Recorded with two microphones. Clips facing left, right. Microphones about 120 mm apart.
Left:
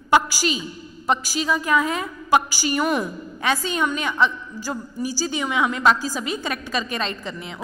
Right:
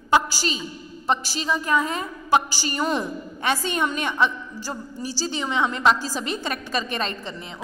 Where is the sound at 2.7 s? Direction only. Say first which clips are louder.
Left 3 dB; 25° right (ahead or behind).